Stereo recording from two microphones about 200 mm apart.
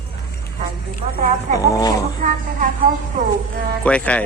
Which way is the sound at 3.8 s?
5° left (ahead or behind).